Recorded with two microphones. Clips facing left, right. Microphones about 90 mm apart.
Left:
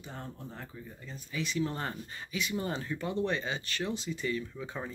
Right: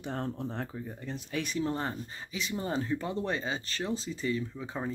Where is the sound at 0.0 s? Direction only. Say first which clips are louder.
Right 9 dB; 70° right (ahead or behind).